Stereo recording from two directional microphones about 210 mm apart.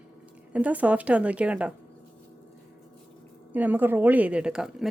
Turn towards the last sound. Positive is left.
turn(degrees=-5)  # may be behind; listen again after turning